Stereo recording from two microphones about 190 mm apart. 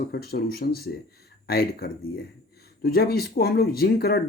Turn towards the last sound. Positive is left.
turn(degrees=55)  # may be behind; listen again after turning